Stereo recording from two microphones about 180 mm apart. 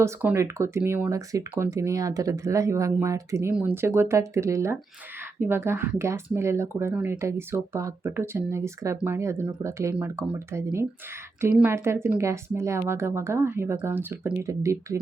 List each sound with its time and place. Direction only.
0.0 s speech: 10° right (ahead or behind)